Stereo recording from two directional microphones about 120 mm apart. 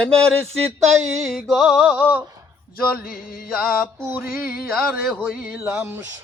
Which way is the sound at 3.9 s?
20° right (ahead or behind).